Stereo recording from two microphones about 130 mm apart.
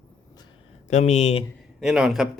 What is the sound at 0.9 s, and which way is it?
Speech, 65° left (ahead or behind).